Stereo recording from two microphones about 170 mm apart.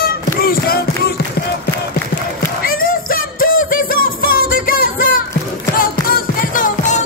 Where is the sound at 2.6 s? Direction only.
60° left (ahead or behind).